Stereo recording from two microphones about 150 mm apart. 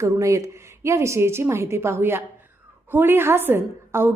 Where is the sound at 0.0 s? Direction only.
20° right (ahead or behind).